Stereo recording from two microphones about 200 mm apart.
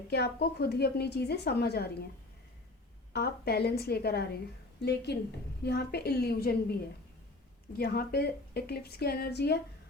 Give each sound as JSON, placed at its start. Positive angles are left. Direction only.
{"t": 0.1, "sound": "a woman's voice", "side_deg": 55}
{"t": 3.1, "sound": "a woman's voice", "side_deg": 55}
{"t": 7.8, "sound": "a woman's voice", "side_deg": 50}